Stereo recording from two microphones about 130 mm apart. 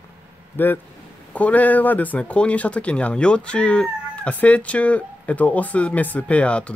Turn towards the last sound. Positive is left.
turn(degrees=10)  # may be behind; listen again after turning